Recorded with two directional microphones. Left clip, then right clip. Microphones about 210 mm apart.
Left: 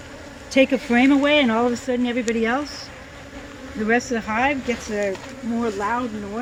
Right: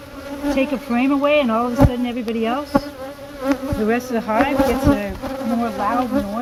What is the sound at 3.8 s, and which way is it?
Speech, 45° right (ahead or behind).